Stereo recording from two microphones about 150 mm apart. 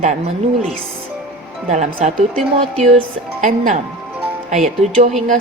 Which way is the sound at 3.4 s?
60° right (ahead or behind).